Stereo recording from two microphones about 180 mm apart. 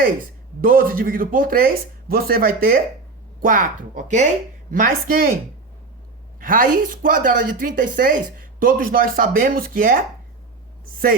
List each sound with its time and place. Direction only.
0.6 s speech: 50° right (ahead or behind)
6.4 s speech: 50° right (ahead or behind)